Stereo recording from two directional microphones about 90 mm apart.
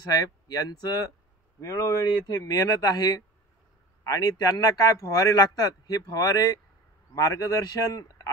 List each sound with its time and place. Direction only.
0.1 s speech: 45° left (ahead or behind)
1.6 s speech: 35° left (ahead or behind)